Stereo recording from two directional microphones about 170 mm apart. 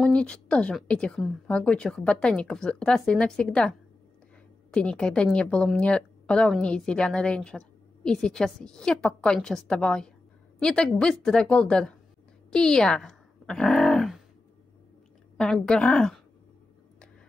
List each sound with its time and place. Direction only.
0.0 s a woman's voice: 5° left (ahead or behind)
15.3 s a woman's voice: 5° left (ahead or behind)